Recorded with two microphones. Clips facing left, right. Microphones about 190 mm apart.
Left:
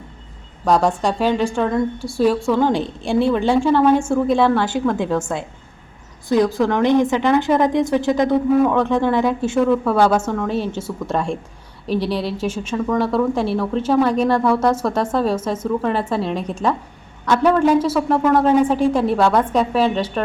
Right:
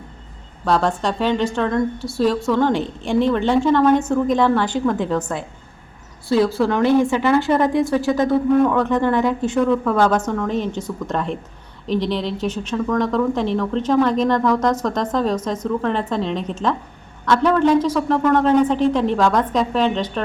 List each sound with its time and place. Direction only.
0.6 s speech: 10° left (ahead or behind)
6.7 s speech: 15° left (ahead or behind)
8.4 s speech: 5° left (ahead or behind)